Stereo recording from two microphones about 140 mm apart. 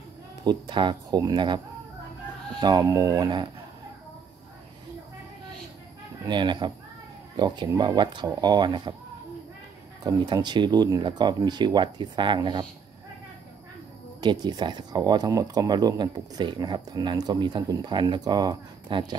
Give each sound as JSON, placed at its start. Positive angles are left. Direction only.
{"t": 0.4, "sound": "speech", "side_deg": -35}
{"t": 2.6, "sound": "speech", "side_deg": -25}
{"t": 6.2, "sound": "speech", "side_deg": -35}
{"t": 10.0, "sound": "speech", "side_deg": -30}
{"t": 14.2, "sound": "speech", "side_deg": -30}